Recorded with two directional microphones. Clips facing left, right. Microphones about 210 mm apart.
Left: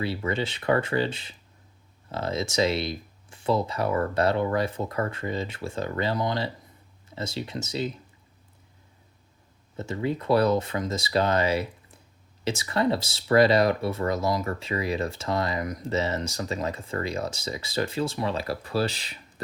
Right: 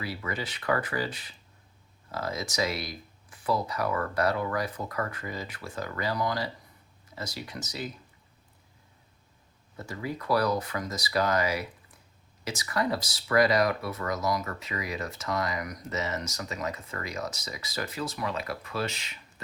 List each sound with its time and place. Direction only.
0.0 s speech: 25° left (ahead or behind)
9.7 s speech: 25° left (ahead or behind)